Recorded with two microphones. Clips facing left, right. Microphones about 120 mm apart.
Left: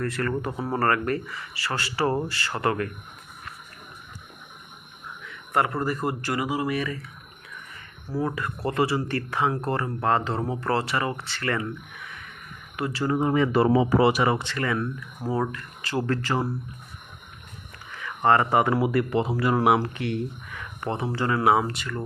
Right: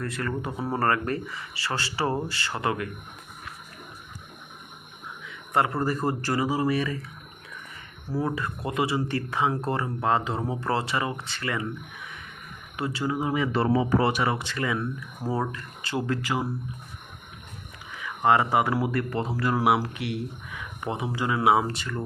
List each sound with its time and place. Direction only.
0.0 s speech: 20° right (ahead or behind)
5.5 s speech: 25° right (ahead or behind)
8.2 s speech: 20° right (ahead or behind)
12.7 s speech: 25° right (ahead or behind)
13.1 s speech: 5° right (ahead or behind)
14.4 s speech: 15° right (ahead or behind)
16.0 s speech: 10° right (ahead or behind)
18.0 s speech: 10° right (ahead or behind); by 22.0 s 30° right (ahead or behind)